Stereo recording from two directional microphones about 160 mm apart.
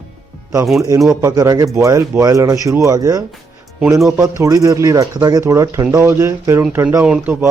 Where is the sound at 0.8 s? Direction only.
20° right (ahead or behind).